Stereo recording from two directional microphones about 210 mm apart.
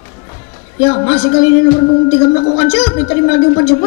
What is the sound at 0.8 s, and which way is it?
Speech, 15° left (ahead or behind).